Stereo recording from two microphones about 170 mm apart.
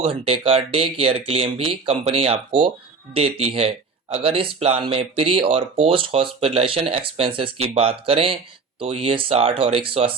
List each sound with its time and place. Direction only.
0.0 s speech: 35° right (ahead or behind)